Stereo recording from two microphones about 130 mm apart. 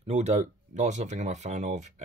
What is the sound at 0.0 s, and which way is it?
Speech, 60° right (ahead or behind).